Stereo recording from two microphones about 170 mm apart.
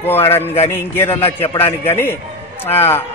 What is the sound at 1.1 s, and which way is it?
Speech, 35° left (ahead or behind).